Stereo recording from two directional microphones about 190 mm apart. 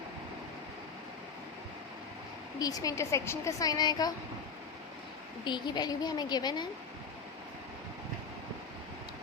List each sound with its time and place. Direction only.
2.6 s a woman's voice: 20° left (ahead or behind)
5.5 s a woman's voice: 25° left (ahead or behind)